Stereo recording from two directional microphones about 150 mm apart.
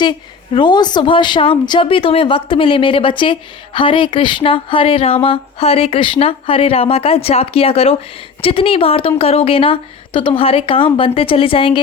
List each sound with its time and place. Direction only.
0.0 s speech: 30° left (ahead or behind)